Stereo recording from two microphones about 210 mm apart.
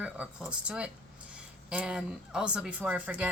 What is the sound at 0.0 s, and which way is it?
A woman's voice, 5° right (ahead or behind).